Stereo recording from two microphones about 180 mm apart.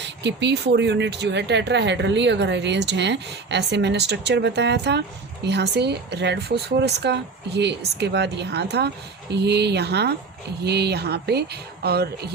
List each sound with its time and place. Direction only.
0.0 s speech: 75° right (ahead or behind)